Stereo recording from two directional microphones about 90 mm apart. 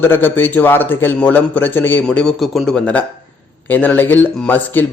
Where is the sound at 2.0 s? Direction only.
5° left (ahead or behind).